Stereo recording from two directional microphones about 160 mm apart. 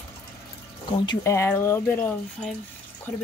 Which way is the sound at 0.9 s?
25° left (ahead or behind).